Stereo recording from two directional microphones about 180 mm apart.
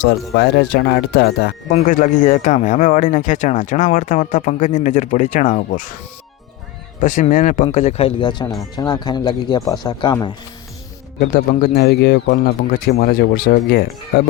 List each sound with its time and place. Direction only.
0.3 s speech: 65° left (ahead or behind)
1.7 s speech: 45° left (ahead or behind)
7.0 s speech: 45° left (ahead or behind); by 10.3 s 25° left (ahead or behind)
11.2 s speech: 55° left (ahead or behind)